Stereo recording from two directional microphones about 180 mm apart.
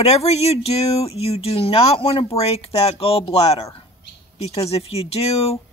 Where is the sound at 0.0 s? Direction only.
35° left (ahead or behind).